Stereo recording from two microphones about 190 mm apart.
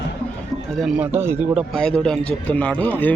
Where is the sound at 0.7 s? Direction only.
5° right (ahead or behind).